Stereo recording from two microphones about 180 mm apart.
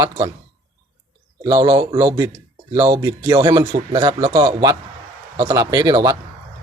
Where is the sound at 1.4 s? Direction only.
20° right (ahead or behind).